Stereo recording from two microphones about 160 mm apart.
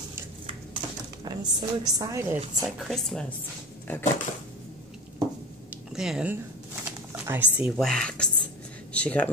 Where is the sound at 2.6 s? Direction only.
Centre (ahead or behind).